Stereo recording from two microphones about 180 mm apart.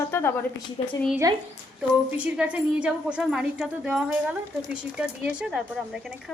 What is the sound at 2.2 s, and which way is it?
A woman's voice, 5° right (ahead or behind).